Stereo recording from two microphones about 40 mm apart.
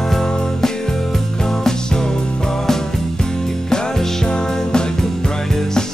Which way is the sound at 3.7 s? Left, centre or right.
Centre.